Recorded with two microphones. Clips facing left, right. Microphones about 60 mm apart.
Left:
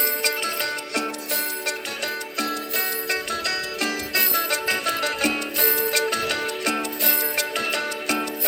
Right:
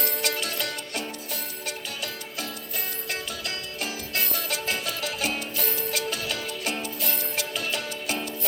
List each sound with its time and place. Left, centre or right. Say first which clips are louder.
0.0 s music: left 4 dB; left
3.1 s music: left 5 dB; left